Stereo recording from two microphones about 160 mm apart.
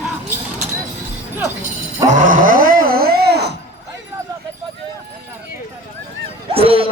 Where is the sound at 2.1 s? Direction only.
55° right (ahead or behind); by 3.5 s 90° right.